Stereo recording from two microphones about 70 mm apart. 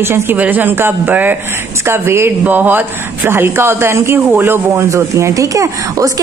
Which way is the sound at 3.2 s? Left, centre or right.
Right.